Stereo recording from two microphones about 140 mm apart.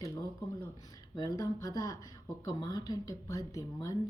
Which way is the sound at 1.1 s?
25° left (ahead or behind).